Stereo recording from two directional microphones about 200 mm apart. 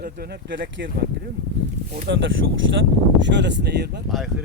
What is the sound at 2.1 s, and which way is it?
Speech, 60° right (ahead or behind).